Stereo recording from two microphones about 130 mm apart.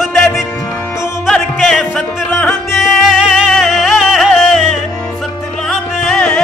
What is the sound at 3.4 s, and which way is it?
Music, centre (ahead or behind).